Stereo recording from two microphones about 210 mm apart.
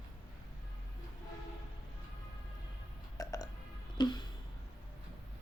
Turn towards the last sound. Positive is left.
turn(degrees=20)  # may be behind; listen again after turning